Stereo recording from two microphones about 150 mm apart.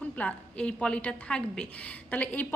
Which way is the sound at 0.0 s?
10° left (ahead or behind).